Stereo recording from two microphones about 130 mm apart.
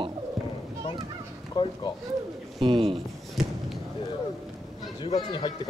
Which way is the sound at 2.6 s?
45° right (ahead or behind).